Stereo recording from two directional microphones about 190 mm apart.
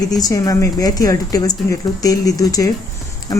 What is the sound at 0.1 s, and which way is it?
Speech, 20° left (ahead or behind).